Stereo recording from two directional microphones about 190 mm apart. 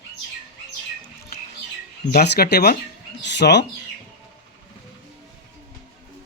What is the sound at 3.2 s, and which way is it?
Speech, 65° left (ahead or behind).